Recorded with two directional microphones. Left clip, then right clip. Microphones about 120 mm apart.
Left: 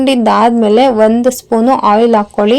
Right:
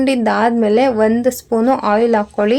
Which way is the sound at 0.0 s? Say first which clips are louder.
Left 5 dB; 35° left (ahead or behind).